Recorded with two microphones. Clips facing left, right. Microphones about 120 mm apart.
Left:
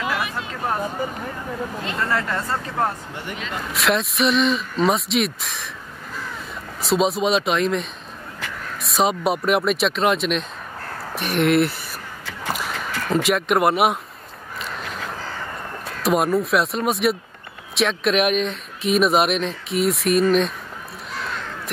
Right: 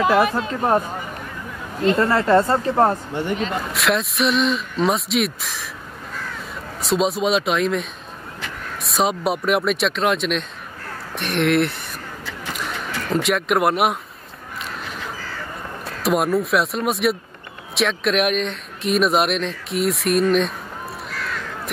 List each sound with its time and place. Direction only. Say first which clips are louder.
0.0 s speech: right 9 dB; 40° right (ahead or behind)
1.9 s speech: right 10 dB; 30° right (ahead or behind)
3.7 s speech: left 3 dB; centre (ahead or behind)
6.8 s speech: even; centre (ahead or behind)
12.5 s a sound: even; centre (ahead or behind)
16.0 s speech: even; centre (ahead or behind)